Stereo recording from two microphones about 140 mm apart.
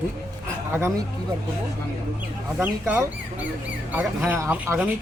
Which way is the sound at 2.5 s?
10° right (ahead or behind).